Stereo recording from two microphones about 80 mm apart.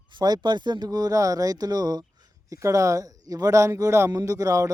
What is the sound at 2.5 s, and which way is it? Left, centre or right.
Speech, right.